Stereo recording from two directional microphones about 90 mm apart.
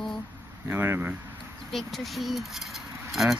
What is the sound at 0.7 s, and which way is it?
Speech, 20° right (ahead or behind).